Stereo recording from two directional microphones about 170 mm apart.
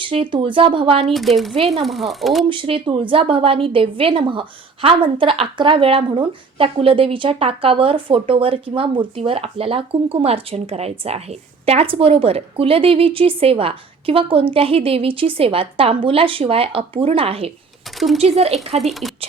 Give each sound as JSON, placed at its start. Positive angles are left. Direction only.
{"t": 0.0, "sound": "a woman's voice", "side_deg": -30}
{"t": 1.0, "sound": "speech", "side_deg": 0}
{"t": 2.5, "sound": "a woman's voice", "side_deg": -30}
{"t": 17.9, "sound": "a sound", "side_deg": 0}
{"t": 18.2, "sound": "a woman's voice", "side_deg": -35}
{"t": 19.0, "sound": "a sound", "side_deg": 0}